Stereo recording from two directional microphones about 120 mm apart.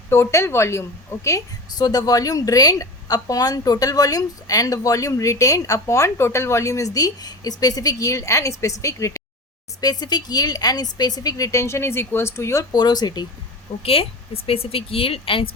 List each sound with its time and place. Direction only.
0.1 s a woman's voice: 25° left (ahead or behind)
13.8 s speech: 55° left (ahead or behind)